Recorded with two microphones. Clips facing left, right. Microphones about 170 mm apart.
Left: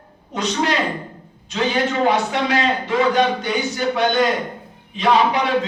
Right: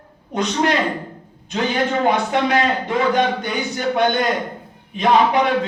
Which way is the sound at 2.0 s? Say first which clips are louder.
Right 1 dB; 50° right (ahead or behind).